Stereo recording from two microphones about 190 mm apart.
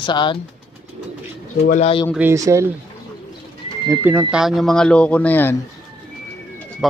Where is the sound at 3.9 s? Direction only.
10° right (ahead or behind); by 5.6 s 10° left (ahead or behind).